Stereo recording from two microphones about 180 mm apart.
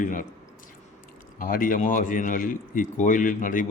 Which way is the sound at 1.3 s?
50° left (ahead or behind).